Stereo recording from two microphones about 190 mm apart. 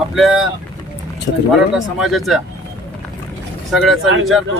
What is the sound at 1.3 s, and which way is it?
Speech, 65° left (ahead or behind).